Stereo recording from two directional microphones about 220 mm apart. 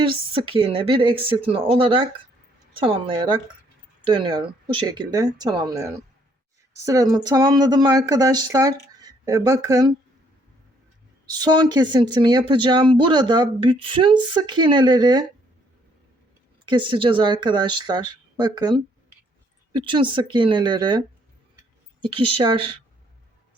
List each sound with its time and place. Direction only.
0.0 s speech: 25° right (ahead or behind)
11.3 s speech: 20° right (ahead or behind)
16.6 s speech: 20° right (ahead or behind)
22.0 s speech: 25° right (ahead or behind)